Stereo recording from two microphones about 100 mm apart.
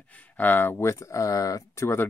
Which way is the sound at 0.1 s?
20° left (ahead or behind).